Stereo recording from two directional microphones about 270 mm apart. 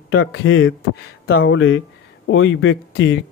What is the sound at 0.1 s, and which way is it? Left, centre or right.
A man's voice, left.